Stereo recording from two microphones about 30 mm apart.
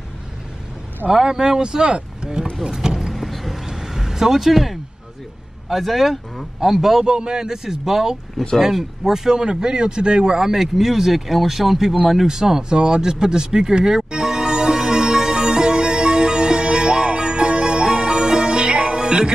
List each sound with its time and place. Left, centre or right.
1.1 s speech: right
2.6 s vehicle: centre
3.1 s vehicle: centre
3.6 s vehicle: centre
5.7 s speech: centre
7.1 s speech: right
7.4 s speech: centre
10.4 s speech: centre
12.3 s speech: centre
12.7 s music: right